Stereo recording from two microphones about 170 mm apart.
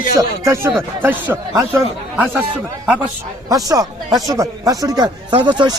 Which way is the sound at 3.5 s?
20° right (ahead or behind).